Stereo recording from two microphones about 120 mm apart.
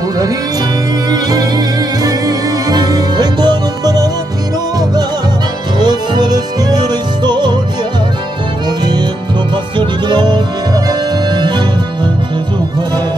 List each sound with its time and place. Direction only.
1.1 s music: 35° right (ahead or behind)
5.8 s music: 35° right (ahead or behind)
8.6 s music: 35° right (ahead or behind)